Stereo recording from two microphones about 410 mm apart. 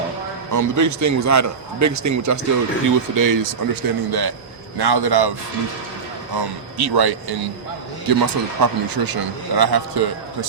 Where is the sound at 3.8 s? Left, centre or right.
Right.